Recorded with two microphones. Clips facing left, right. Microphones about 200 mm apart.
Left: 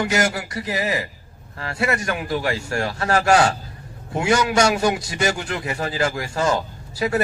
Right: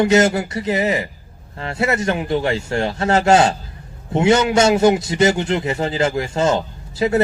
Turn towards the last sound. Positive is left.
turn(degrees=-25)  # may be behind; listen again after turning